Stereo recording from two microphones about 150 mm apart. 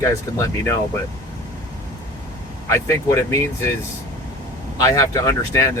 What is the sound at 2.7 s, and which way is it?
Speech, 20° left (ahead or behind).